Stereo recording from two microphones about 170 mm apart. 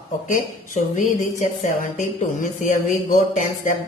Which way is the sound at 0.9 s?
50° left (ahead or behind).